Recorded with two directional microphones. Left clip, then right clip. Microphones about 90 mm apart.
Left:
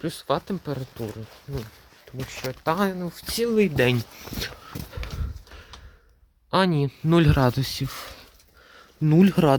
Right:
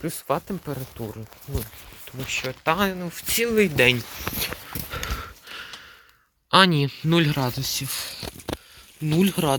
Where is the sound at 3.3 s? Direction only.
30° left (ahead or behind).